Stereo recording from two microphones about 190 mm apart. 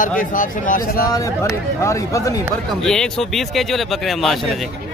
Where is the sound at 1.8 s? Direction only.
15° left (ahead or behind).